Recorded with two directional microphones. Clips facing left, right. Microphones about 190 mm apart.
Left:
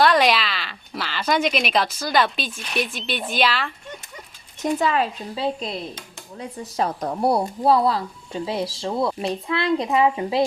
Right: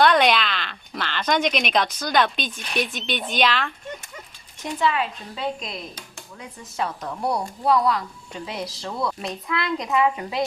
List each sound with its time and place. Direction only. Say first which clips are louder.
0.0 s speech: even; centre (ahead or behind)
4.6 s speech: left 3 dB; 40° left (ahead or behind)